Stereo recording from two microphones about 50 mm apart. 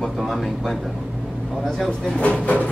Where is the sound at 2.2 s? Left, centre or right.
Left.